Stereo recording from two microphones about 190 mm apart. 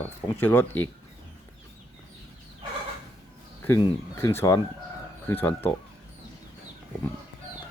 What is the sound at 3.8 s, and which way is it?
Speech, 15° left (ahead or behind).